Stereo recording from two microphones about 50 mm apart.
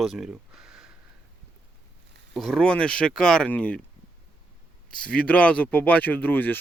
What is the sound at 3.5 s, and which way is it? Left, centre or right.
Speech, left.